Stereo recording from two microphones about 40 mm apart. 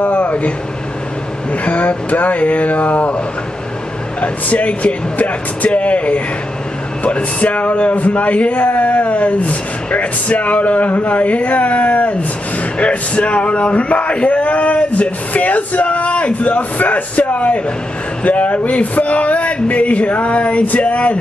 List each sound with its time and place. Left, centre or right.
0.0 s a sound: left
1.5 s speech: left
4.2 s speech: left